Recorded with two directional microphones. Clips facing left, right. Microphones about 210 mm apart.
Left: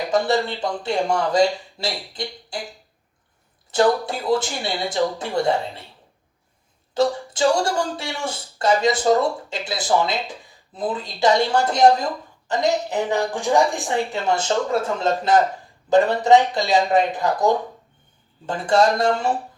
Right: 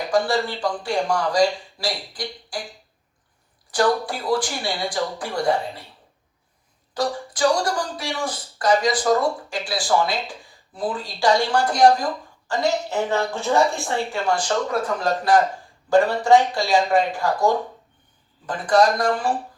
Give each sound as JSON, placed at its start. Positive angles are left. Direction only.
{"t": 0.1, "sound": "speech", "side_deg": 25}
{"t": 3.7, "sound": "speech", "side_deg": 25}
{"t": 6.9, "sound": "speech", "side_deg": 25}